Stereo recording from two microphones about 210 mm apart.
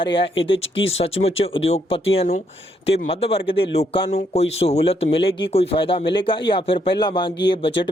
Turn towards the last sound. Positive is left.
turn(degrees=25)  # may be behind; listen again after turning